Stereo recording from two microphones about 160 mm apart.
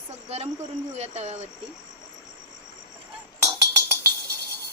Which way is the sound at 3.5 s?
20° right (ahead or behind).